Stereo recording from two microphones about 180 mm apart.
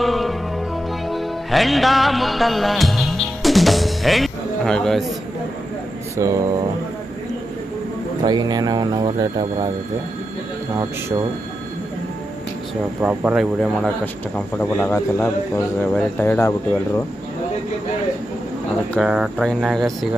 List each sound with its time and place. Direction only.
0.0 s music: centre (ahead or behind)
6.1 s a sound: 15° right (ahead or behind)
8.2 s speech: 25° right (ahead or behind)
13.0 s speech: 5° right (ahead or behind); by 17.0 s 15° left (ahead or behind)
18.9 s speech: 5° right (ahead or behind)